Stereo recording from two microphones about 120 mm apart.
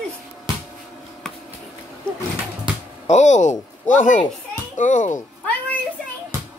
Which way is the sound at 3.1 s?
80° left.